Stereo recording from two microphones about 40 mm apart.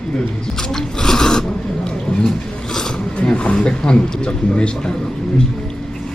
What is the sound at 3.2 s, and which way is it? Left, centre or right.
Speech, left.